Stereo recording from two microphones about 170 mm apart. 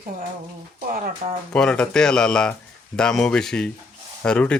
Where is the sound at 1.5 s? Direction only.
5° left (ahead or behind).